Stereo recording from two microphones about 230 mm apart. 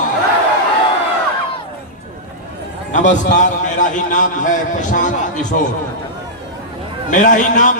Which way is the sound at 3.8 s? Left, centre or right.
Left.